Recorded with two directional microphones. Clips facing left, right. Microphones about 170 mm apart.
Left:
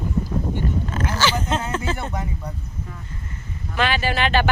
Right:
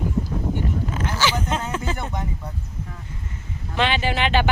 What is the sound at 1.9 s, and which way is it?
Speech, 5° left (ahead or behind).